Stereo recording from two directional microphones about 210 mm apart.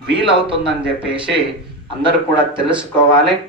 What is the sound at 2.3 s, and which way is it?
Speech, 5° right (ahead or behind).